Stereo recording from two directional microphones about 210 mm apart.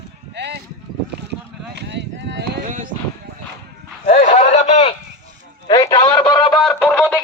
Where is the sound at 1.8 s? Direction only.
55° right (ahead or behind).